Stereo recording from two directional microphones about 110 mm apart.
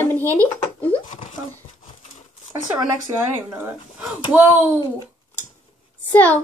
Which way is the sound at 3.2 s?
20° right (ahead or behind).